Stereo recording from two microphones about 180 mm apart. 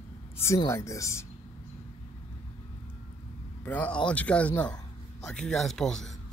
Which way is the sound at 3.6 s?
10° left (ahead or behind).